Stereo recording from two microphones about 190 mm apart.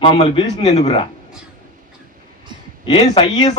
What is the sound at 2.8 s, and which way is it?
Speech, 25° left (ahead or behind).